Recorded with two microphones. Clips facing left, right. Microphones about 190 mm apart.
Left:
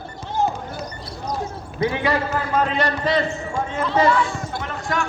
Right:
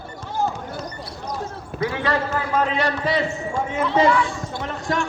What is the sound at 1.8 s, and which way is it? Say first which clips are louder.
Speech: left 3 dB; 20° left (ahead or behind).